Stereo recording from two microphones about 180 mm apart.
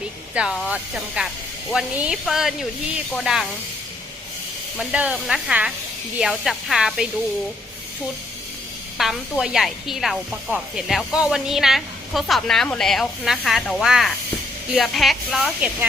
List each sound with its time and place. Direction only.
0.3 s speech: centre (ahead or behind)
4.8 s speech: 5° right (ahead or behind)
9.0 s speech: centre (ahead or behind)